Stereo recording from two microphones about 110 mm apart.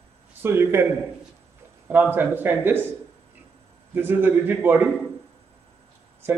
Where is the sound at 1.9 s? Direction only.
15° right (ahead or behind).